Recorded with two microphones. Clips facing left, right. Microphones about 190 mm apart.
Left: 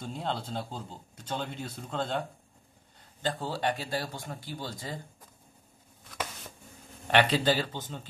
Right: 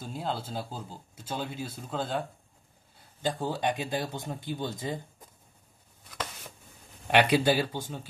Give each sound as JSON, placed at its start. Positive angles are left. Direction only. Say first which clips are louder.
{"t": 0.0, "sound": "speech", "louder": "even", "side_deg": -5}
{"t": 7.1, "sound": "speech", "louder": "right 2 dB", "side_deg": -10}